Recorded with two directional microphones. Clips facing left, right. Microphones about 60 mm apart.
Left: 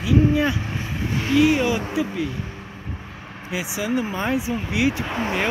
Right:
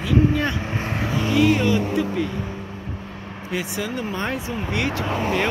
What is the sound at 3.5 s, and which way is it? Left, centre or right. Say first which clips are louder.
Speech: left 2 dB; centre.